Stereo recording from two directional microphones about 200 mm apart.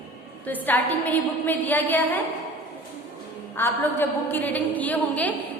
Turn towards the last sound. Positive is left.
turn(degrees=10)  # may be behind; listen again after turning